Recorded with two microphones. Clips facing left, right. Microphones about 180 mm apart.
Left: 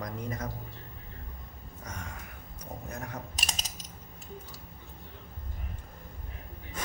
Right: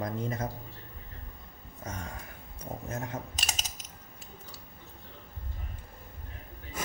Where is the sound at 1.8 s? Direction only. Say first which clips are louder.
Right 3 dB; 30° right (ahead or behind).